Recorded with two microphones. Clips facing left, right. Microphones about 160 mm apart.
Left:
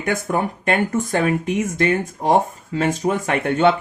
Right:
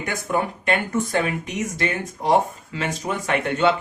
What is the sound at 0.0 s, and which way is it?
Speech, 50° left (ahead or behind).